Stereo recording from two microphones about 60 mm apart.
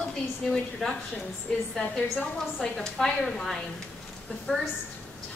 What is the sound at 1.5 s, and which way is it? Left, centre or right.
Speech, centre.